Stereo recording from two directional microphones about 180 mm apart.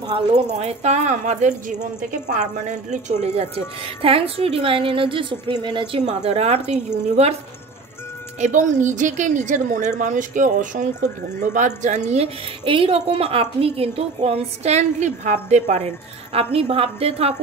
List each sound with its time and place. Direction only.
0.1 s a woman's voice: 35° right (ahead or behind)
6.0 s a woman's voice: 35° right (ahead or behind)
8.4 s a woman's voice: 45° right (ahead or behind)